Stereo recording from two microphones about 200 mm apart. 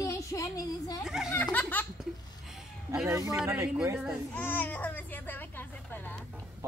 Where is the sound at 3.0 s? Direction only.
15° right (ahead or behind).